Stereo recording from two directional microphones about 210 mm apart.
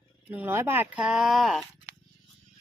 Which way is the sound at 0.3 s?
10° right (ahead or behind).